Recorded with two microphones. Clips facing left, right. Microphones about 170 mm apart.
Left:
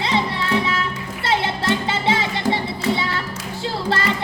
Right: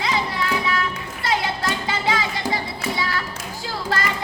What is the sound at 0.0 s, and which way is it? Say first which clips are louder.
Music: left 2 dB; 30° left (ahead or behind).